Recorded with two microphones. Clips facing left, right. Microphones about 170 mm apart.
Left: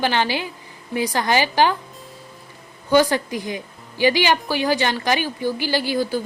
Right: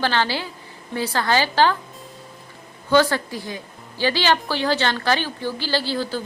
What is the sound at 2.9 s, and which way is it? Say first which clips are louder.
A woman's voice: left 1 dB; 15° left (ahead or behind).